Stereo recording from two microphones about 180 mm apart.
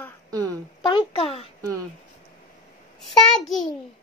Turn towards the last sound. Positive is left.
turn(degrees=0)  # may be behind; listen again after turning